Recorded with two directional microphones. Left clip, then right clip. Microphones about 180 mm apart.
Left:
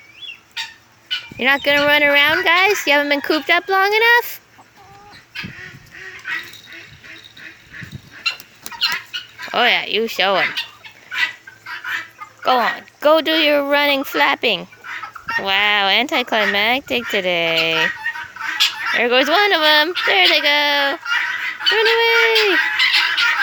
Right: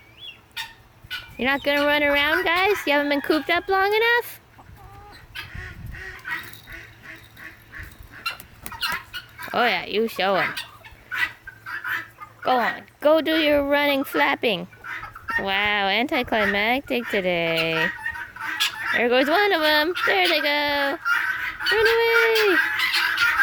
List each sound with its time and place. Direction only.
1.4 s speech: 5° left (ahead or behind)
6.3 s duck: 60° right (ahead or behind)
8.8 s bird flight: 60° right (ahead or behind)
9.5 s speech: centre (ahead or behind)
11.1 s a sound: 50° right (ahead or behind)
12.4 s speech: 10° left (ahead or behind)
14.8 s chicken: 45° right (ahead or behind)
15.4 s speech: centre (ahead or behind)
17.8 s chicken: 45° right (ahead or behind)
18.9 s speech: centre (ahead or behind)
21.0 s fowl: 60° right (ahead or behind)
21.9 s speech: centre (ahead or behind)
22.5 s music: 55° right (ahead or behind)